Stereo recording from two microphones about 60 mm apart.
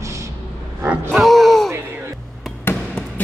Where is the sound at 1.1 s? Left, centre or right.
Centre.